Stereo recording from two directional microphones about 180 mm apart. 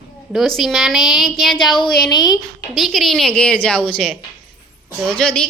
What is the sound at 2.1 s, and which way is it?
Speech, 20° left (ahead or behind).